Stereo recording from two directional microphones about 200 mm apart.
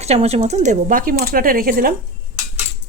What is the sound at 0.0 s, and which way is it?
Speech, 30° right (ahead or behind).